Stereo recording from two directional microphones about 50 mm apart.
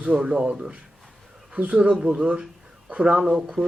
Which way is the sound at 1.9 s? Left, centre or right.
Centre.